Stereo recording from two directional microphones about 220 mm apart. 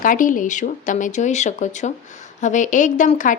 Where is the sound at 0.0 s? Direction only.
35° left (ahead or behind).